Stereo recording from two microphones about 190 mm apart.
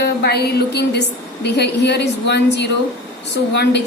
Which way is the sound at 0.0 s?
60° left (ahead or behind).